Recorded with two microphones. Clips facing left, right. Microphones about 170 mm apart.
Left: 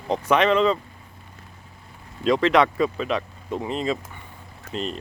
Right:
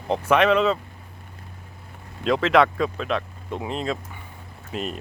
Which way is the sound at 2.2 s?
Centre (ahead or behind).